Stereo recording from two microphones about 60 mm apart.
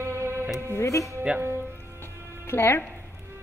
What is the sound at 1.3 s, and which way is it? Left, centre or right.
Music, centre.